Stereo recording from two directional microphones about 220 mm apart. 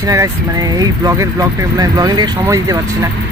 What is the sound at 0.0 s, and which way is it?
Speech, 15° right (ahead or behind).